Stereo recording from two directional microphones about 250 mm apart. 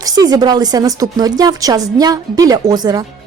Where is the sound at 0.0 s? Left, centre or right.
Centre.